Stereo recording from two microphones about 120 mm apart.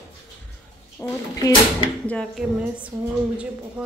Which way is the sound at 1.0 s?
20° left (ahead or behind).